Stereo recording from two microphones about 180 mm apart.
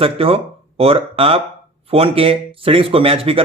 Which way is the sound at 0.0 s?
30° right (ahead or behind).